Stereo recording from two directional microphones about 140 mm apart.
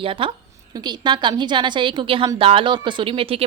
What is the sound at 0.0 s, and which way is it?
Speech, 40° right (ahead or behind).